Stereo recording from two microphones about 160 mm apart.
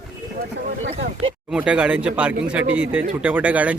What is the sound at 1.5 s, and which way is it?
Speech, 10° right (ahead or behind).